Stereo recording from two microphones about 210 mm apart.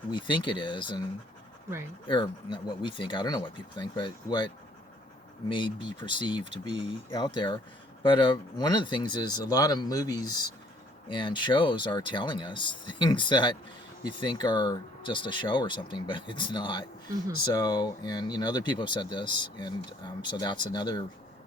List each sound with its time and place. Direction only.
0.1 s speech: 20° left (ahead or behind)
2.0 s speech: 20° left (ahead or behind)
5.5 s speech: 20° left (ahead or behind)